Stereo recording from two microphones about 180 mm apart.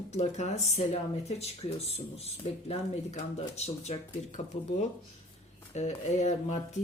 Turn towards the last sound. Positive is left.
turn(degrees=40)  # may be behind; listen again after turning